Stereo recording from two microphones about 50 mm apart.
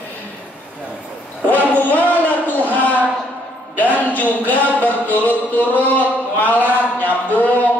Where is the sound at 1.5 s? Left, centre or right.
Left.